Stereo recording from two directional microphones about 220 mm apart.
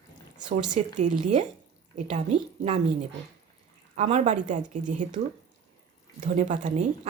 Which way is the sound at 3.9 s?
30° right (ahead or behind).